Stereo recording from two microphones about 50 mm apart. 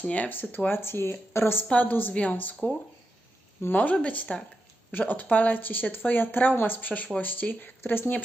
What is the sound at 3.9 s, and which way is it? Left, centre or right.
Speech, left.